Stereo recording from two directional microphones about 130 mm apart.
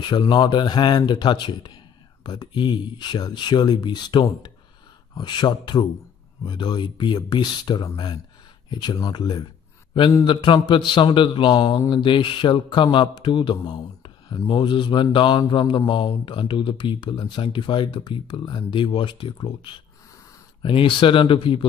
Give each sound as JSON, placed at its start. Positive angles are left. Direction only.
{"t": 0.0, "sound": "speech", "side_deg": 35}